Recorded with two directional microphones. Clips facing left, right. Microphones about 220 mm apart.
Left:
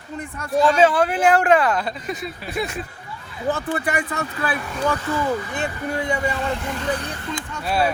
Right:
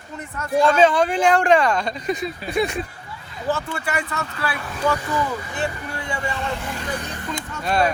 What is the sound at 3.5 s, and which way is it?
Speech, 15° left (ahead or behind).